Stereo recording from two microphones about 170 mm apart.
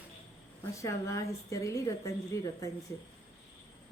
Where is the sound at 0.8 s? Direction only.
20° left (ahead or behind).